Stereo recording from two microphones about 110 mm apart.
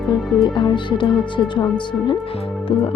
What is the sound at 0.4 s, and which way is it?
Speech, 45° left (ahead or behind).